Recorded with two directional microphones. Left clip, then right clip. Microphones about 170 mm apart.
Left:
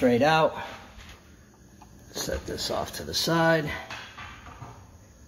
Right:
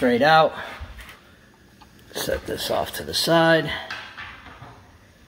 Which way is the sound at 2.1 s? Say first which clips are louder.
Right 6 dB; 25° right (ahead or behind).